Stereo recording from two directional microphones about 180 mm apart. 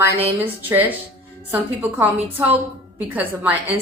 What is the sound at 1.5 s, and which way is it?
A woman's voice, 10° right (ahead or behind).